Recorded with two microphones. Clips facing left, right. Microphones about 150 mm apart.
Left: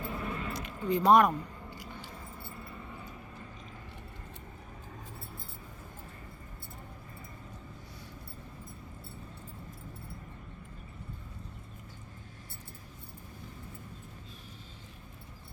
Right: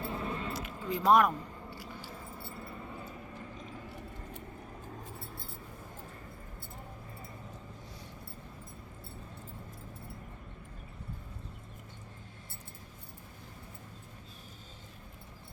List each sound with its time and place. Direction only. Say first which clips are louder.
0.1 s keys jangling: even; 30° right (ahead or behind)
0.5 s keys jangling: left 5 dB; 5° right (ahead or behind)
1.3 s keys jangling: left 2 dB; 20° left (ahead or behind)